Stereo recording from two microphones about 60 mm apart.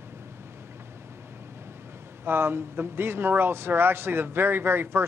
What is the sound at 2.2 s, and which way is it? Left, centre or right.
Speech, right.